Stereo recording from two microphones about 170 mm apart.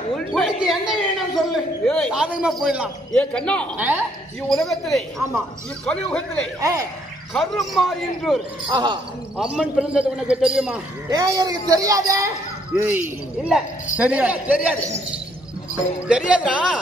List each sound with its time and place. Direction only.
0.1 s a man's voice: centre (ahead or behind)
3.1 s speech: 5° left (ahead or behind)
3.7 s a man's voice: 10° right (ahead or behind)
6.6 s a man's voice: 20° right (ahead or behind)
7.3 s a man's voice: centre (ahead or behind)
8.6 s a woman's voice: 25° right (ahead or behind)
9.4 s a man's voice: 5° right (ahead or behind)
11.1 s a woman's voice: 20° right (ahead or behind)
16.1 s a man's voice: 5° right (ahead or behind)